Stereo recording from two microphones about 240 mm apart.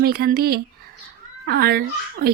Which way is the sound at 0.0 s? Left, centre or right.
Right.